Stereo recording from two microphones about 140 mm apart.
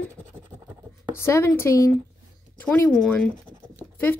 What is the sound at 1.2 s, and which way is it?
Speech, 20° left (ahead or behind).